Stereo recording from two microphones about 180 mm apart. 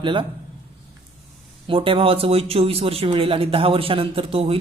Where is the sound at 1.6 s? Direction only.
30° right (ahead or behind).